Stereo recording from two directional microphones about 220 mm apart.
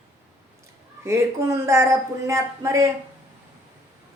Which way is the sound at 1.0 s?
10° right (ahead or behind).